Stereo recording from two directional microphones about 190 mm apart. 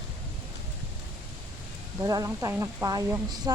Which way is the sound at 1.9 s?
20° right (ahead or behind).